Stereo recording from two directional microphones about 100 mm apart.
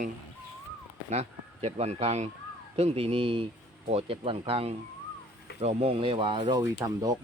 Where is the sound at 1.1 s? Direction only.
90° right; by 6.6 s 60° right (ahead or behind).